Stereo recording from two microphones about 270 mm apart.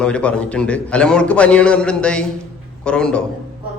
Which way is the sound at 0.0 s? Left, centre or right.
Centre.